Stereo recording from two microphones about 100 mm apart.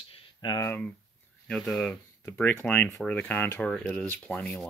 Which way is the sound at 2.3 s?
15° left (ahead or behind).